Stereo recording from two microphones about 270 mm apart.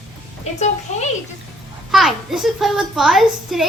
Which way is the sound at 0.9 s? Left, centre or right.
Left.